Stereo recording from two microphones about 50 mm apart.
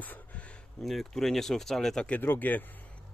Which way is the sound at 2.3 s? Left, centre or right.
Left.